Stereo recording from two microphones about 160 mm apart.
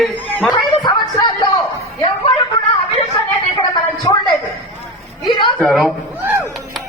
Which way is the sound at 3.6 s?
25° left (ahead or behind).